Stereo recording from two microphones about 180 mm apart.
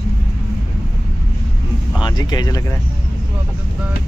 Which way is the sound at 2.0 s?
25° left (ahead or behind).